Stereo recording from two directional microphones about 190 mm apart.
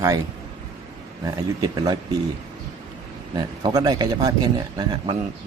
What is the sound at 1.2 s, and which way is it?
Speech, 20° right (ahead or behind).